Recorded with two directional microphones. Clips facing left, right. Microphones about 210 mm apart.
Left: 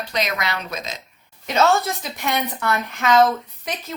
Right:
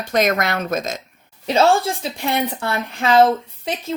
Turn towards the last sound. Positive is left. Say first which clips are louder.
# right 5 dB
turn(degrees=-30)  # may be behind; listen again after turning